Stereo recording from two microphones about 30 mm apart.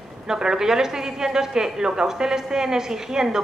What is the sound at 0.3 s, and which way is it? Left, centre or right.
A woman's voice, right.